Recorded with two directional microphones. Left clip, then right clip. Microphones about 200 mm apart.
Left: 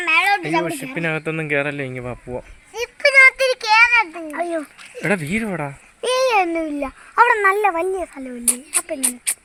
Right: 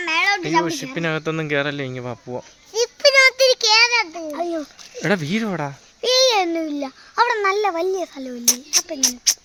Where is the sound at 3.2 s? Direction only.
60° right (ahead or behind).